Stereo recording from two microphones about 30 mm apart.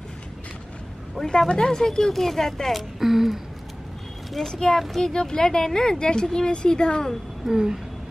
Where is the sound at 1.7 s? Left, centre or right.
Centre.